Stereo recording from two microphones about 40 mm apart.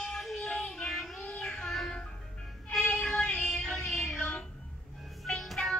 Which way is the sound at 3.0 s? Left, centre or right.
Centre.